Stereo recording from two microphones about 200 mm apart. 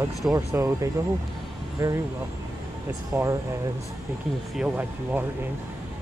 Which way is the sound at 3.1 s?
15° right (ahead or behind).